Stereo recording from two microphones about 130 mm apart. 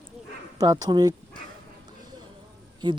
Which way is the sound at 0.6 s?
30° right (ahead or behind).